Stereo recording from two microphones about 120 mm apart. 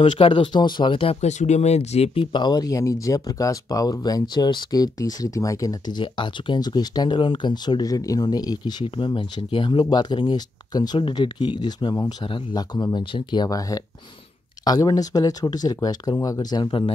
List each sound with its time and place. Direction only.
0.0 s speech: 45° left (ahead or behind)
1.2 s speech: 70° left (ahead or behind)
2.3 s speech: 35° left (ahead or behind)